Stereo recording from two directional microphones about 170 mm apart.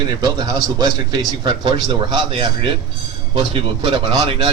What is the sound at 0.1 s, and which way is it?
Speech, 25° right (ahead or behind).